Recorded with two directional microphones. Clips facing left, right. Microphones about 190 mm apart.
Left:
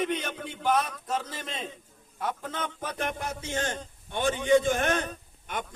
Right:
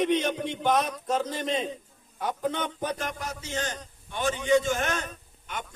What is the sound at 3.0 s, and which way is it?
A man's voice, 55° left (ahead or behind).